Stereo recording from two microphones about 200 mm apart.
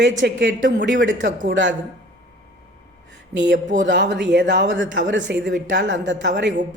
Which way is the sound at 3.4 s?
60° right (ahead or behind).